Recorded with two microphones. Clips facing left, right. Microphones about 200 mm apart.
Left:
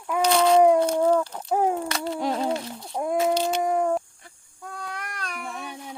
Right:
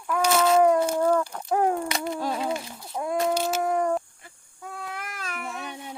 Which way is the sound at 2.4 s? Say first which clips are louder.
Left 3 dB; 5° right (ahead or behind).